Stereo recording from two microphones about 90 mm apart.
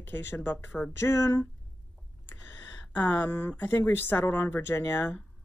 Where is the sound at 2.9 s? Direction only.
20° left (ahead or behind).